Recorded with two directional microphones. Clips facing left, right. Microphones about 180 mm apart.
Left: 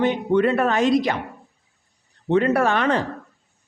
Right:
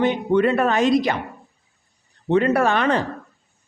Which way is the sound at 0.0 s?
15° right (ahead or behind).